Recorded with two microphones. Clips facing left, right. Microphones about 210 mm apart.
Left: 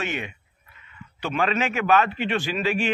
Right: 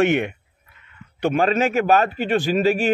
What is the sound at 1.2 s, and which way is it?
A man's voice, 45° right (ahead or behind).